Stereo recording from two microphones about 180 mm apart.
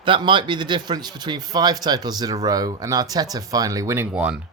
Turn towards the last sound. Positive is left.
turn(degrees=-5)  # may be behind; listen again after turning